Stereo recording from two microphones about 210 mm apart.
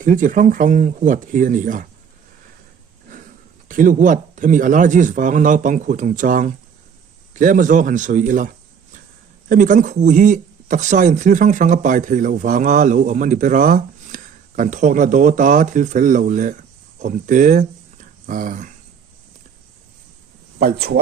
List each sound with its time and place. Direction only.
0.0 s speech: 40° right (ahead or behind)
3.7 s speech: 40° right (ahead or behind)
9.5 s speech: 40° right (ahead or behind)
20.6 s speech: 45° right (ahead or behind)